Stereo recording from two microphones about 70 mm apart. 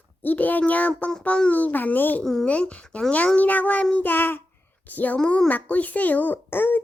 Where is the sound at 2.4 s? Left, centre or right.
Centre.